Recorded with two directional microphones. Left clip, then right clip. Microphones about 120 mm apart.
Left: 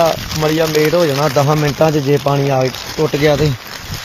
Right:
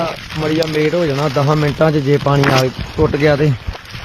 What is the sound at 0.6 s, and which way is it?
Speech, centre (ahead or behind).